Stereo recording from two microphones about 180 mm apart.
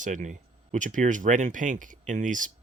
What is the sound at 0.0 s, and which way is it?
Speech, 45° right (ahead or behind).